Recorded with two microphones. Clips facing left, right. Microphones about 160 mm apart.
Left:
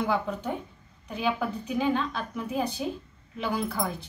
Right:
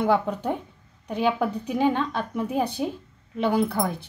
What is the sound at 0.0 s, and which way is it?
A woman's voice, 65° right (ahead or behind).